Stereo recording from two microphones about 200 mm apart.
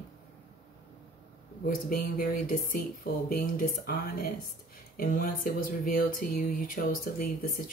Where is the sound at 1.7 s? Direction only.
45° left (ahead or behind).